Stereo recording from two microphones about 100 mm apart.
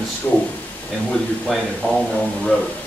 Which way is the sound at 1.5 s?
Centre (ahead or behind).